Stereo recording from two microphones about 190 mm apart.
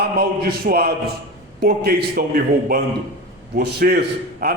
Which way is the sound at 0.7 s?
55° right (ahead or behind).